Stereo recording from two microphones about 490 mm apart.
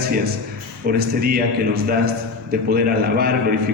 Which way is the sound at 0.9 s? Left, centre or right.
Centre.